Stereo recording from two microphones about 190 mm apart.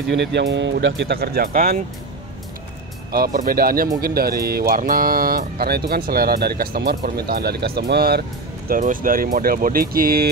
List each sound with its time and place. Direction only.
0.1 s speech: 65° right (ahead or behind); by 1.8 s 50° right (ahead or behind)
3.1 s speech: 50° right (ahead or behind)